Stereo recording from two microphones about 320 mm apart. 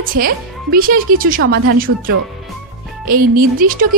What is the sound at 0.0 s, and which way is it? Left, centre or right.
Speech, right.